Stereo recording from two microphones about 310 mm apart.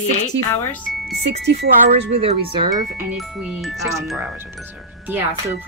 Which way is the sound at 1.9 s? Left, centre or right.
Centre.